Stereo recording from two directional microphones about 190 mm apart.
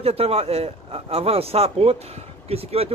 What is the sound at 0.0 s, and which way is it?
Speech, 30° right (ahead or behind).